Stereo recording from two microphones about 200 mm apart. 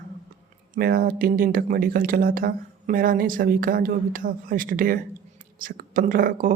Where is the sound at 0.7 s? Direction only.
50° right (ahead or behind).